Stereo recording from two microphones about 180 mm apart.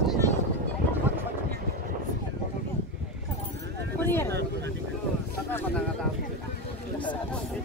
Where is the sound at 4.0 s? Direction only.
10° left (ahead or behind).